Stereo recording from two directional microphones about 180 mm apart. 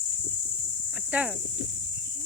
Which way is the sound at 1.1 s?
10° right (ahead or behind).